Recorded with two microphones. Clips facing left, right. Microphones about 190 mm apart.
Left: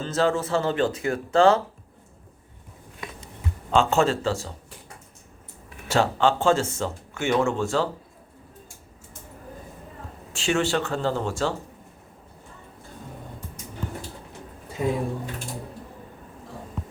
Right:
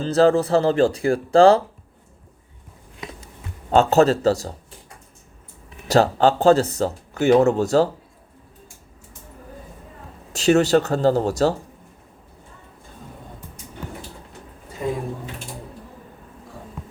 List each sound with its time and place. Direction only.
0.0 s speech: 35° right (ahead or behind)
3.7 s speech: 40° right (ahead or behind)
5.9 s speech: 40° right (ahead or behind)
10.3 s speech: 40° right (ahead or behind)